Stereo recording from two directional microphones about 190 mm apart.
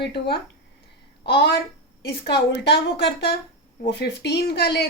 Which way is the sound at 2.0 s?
55° left (ahead or behind).